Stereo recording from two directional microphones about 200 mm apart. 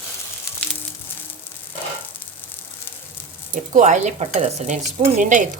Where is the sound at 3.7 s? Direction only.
35° right (ahead or behind).